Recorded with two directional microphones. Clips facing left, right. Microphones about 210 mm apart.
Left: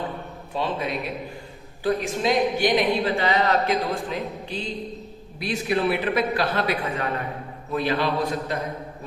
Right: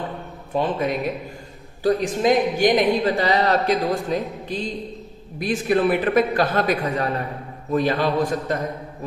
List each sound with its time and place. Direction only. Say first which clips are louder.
0.5 s a man's voice: right 5 dB; 50° right (ahead or behind)